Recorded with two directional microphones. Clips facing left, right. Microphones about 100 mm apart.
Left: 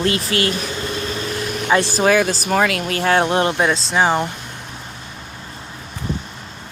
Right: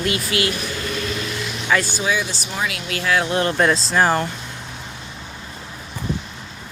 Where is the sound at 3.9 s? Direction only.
15° left (ahead or behind).